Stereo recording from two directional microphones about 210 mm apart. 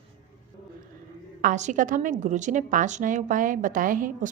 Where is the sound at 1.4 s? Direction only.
35° right (ahead or behind).